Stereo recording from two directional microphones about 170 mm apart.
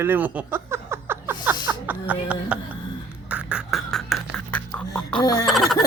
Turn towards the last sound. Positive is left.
turn(degrees=0)  # may be behind; listen again after turning